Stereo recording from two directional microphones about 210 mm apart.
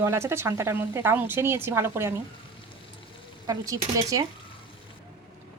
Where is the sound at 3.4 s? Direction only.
15° right (ahead or behind).